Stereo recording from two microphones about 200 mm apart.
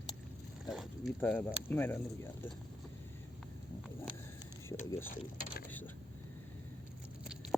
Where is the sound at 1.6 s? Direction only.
10° left (ahead or behind).